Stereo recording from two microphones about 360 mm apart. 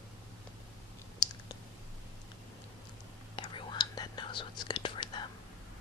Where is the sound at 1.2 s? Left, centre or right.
Centre.